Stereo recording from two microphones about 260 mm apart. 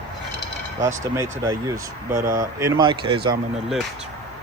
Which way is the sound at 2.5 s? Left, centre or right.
Centre.